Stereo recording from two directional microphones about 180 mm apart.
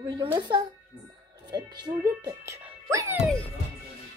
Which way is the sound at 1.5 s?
25° right (ahead or behind).